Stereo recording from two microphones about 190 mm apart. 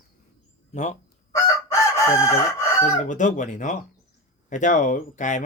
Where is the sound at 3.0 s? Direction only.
40° left (ahead or behind).